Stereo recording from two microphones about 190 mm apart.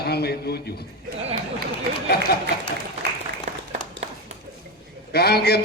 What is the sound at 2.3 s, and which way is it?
Speech, 55° left (ahead or behind).